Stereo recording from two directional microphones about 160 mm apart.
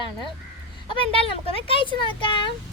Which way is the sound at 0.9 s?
35° left (ahead or behind).